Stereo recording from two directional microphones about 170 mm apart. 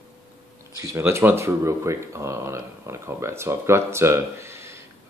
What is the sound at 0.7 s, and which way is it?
Speech, 15° right (ahead or behind).